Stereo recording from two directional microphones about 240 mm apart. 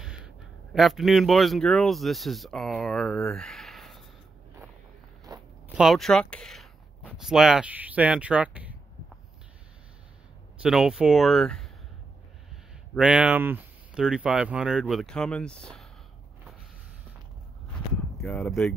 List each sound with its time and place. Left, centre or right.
0.0 s a sound: centre
0.7 s speech: centre
5.3 s zipper: centre
5.8 s speech: centre
10.6 s speech: centre
12.9 s speech: centre
18.1 s speech: centre